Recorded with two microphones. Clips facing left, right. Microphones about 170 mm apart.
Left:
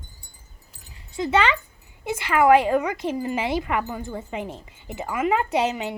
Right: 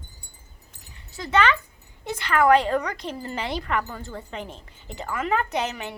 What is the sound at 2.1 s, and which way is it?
Speech, 10° left (ahead or behind).